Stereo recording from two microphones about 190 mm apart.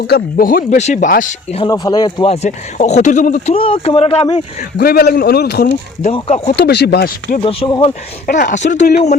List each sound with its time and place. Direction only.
0.1 s speech: 50° left (ahead or behind)
1.5 s speech: 20° left (ahead or behind)
2.3 s speech: 35° left (ahead or behind)
4.8 s a man's voice: 55° left (ahead or behind)
6.1 s speech: 35° left (ahead or behind)
6.6 s a man's voice: 65° left (ahead or behind)
7.3 s speech: 30° left (ahead or behind)
8.4 s speech: 40° left (ahead or behind)